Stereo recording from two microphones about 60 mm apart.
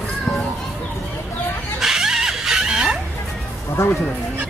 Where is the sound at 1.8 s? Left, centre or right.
Centre.